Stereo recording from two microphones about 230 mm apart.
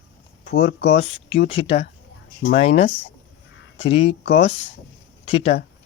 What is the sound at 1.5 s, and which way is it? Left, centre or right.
Speech, left.